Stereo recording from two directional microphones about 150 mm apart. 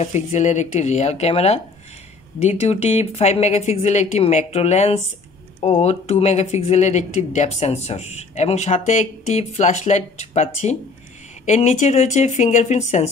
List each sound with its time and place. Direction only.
0.0 s speech: 50° left (ahead or behind)